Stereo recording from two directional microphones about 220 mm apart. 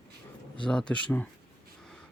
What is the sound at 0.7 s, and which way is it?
Speech, 5° left (ahead or behind).